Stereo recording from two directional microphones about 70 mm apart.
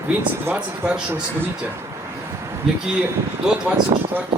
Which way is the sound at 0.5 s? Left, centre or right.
Centre.